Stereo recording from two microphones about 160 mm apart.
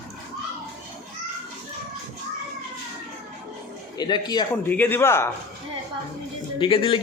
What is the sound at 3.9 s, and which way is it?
Speech, 25° left (ahead or behind).